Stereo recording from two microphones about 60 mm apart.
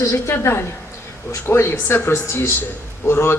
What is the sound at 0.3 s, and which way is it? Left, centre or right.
A woman's voice, left.